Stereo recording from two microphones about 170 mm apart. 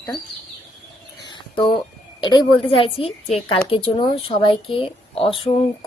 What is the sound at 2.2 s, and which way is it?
Speech, 25° left (ahead or behind).